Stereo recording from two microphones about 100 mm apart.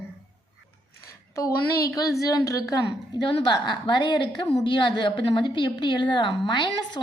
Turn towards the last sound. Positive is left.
turn(degrees=45)  # may be behind; listen again after turning